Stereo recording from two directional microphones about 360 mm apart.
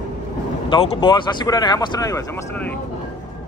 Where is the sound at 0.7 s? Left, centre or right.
Centre.